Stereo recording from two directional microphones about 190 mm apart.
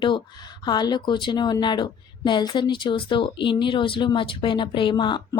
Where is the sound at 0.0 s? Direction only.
25° left (ahead or behind).